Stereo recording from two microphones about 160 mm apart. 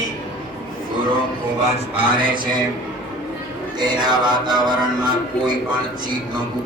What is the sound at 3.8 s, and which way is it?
Music, 25° right (ahead or behind).